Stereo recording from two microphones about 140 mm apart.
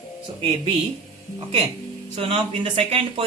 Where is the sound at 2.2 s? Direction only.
40° right (ahead or behind).